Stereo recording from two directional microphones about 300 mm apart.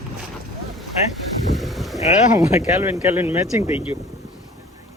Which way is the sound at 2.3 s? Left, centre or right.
Centre.